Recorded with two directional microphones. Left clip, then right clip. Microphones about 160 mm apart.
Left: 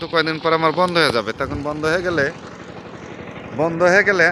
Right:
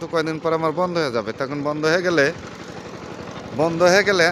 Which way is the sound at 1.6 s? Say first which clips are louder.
Right 1 dB; 20° right (ahead or behind).